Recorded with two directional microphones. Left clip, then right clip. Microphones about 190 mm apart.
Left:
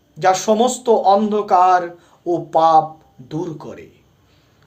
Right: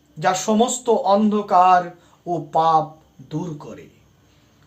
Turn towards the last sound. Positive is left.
turn(degrees=40)  # may be behind; listen again after turning